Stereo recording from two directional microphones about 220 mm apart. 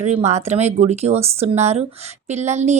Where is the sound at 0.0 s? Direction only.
30° right (ahead or behind).